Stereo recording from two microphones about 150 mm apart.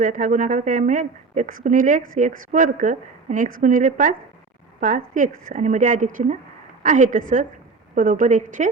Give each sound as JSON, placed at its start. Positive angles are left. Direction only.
{"t": 0.0, "sound": "speech", "side_deg": -60}